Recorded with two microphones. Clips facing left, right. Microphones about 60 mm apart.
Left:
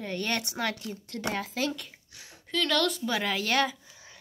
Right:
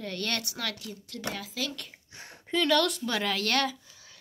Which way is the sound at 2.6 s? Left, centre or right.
Centre.